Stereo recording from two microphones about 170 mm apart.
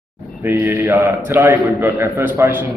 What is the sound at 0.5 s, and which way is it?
A man's voice, 15° right (ahead or behind).